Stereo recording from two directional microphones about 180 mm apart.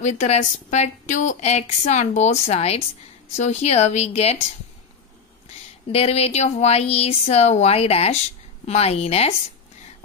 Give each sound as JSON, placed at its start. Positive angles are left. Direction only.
{"t": 0.0, "sound": "a woman's voice", "side_deg": 40}
{"t": 5.9, "sound": "a woman's voice", "side_deg": 35}